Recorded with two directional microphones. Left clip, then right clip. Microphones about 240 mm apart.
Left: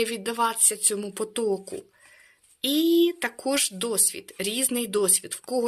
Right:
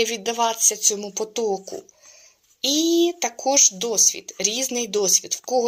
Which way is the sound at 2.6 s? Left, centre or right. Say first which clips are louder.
Right 2 dB; left.